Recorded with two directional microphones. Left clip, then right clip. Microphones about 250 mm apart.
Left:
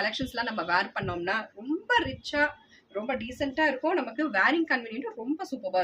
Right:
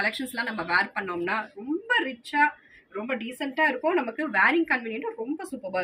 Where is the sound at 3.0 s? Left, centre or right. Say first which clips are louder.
Even; centre.